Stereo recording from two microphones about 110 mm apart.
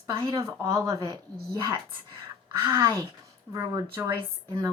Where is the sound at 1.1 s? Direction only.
45° right (ahead or behind).